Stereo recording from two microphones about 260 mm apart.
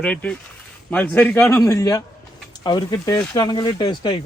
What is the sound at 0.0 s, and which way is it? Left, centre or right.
Speech, centre.